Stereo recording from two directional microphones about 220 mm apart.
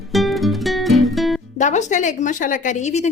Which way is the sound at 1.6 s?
35° left (ahead or behind).